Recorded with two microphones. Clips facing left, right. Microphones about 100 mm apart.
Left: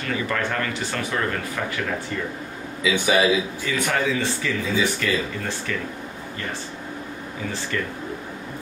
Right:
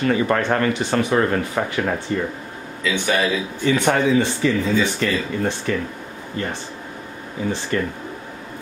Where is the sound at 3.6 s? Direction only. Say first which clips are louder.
Right 6 dB; 25° right (ahead or behind).